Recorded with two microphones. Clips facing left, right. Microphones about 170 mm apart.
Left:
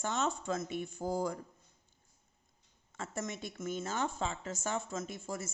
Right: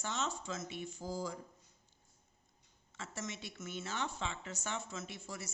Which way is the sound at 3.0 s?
50° left (ahead or behind).